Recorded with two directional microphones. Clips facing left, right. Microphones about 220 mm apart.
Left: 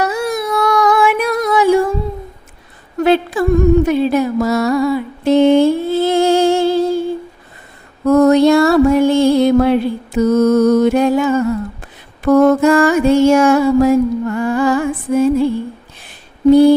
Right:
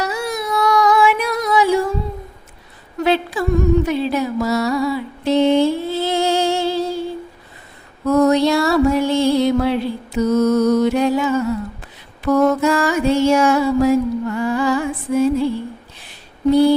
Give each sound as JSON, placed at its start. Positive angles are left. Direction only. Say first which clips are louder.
{"t": 0.0, "sound": "child singing", "louder": "left 5 dB", "side_deg": 50}
{"t": 3.0, "sound": "a sound", "louder": "left 5 dB", "side_deg": 50}
{"t": 3.8, "sound": "music", "louder": "left 5 dB", "side_deg": 50}
{"t": 8.0, "sound": "music", "louder": "left 5 dB", "side_deg": 50}
{"t": 12.2, "sound": "mantra", "louder": "left 5 dB", "side_deg": 50}
{"t": 16.0, "sound": "a sound", "louder": "left 7 dB", "side_deg": 50}